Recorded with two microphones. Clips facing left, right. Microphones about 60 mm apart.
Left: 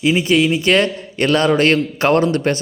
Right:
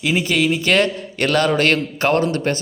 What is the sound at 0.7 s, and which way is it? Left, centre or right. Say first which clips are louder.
A man's voice: left 2 dB; left.